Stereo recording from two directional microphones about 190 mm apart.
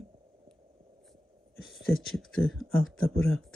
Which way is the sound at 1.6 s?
Centre (ahead or behind).